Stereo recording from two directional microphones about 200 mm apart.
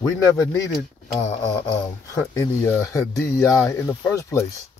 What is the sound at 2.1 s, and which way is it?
Speech, 15° left (ahead or behind).